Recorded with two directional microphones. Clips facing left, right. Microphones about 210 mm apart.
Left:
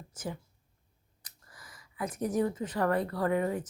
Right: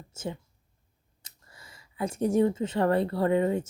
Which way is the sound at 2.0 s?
30° right (ahead or behind).